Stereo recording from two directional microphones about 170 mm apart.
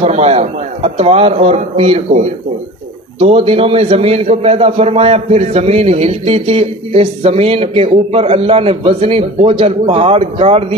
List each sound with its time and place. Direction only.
0.0 s a man's voice: 40° right (ahead or behind)
3.2 s a man's voice: 35° right (ahead or behind)